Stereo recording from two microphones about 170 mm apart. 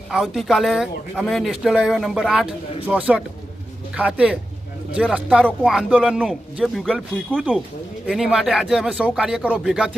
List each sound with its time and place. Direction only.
0.1 s speech: centre (ahead or behind)